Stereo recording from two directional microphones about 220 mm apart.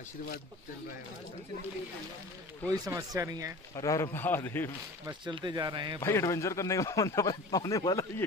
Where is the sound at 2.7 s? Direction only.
15° right (ahead or behind).